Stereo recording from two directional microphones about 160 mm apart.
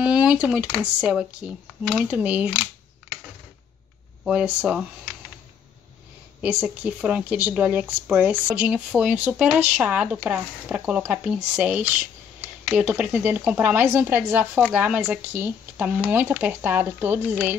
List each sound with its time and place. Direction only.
0.0 s speech: 10° right (ahead or behind)
4.2 s speech: 5° right (ahead or behind)
6.4 s speech: 5° right (ahead or behind)